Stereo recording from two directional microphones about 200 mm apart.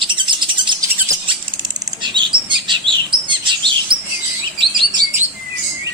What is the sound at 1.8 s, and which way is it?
Chirp, 25° right (ahead or behind).